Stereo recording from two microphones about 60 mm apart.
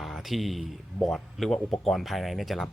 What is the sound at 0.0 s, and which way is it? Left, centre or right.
Speech, centre.